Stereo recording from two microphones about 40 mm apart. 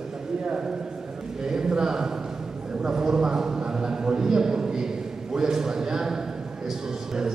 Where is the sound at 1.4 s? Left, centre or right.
Centre.